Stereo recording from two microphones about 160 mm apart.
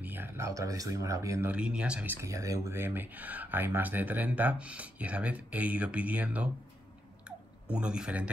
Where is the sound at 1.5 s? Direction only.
5° right (ahead or behind).